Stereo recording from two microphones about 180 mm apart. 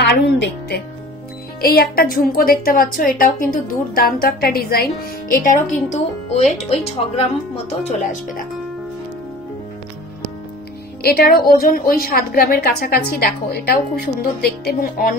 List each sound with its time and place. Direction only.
0.0 s speech: 70° left (ahead or behind)
1.6 s a woman's voice: 55° left (ahead or behind); by 7.2 s 35° left (ahead or behind)
11.0 s a woman's voice: 60° left (ahead or behind)